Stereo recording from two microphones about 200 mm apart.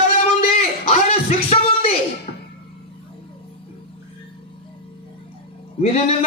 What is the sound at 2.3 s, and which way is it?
Music, 35° left (ahead or behind).